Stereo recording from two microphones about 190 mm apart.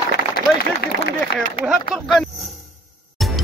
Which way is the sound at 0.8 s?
60° left (ahead or behind).